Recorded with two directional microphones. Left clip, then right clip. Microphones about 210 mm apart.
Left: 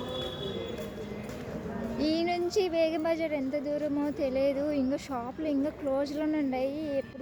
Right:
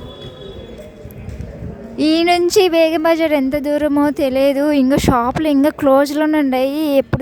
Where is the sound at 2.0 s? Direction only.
40° right (ahead or behind).